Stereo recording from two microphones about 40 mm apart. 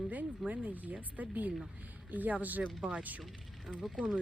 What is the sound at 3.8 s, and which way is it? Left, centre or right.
Speech, centre.